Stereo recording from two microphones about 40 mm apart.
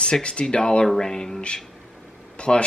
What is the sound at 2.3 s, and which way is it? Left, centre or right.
Speech, left.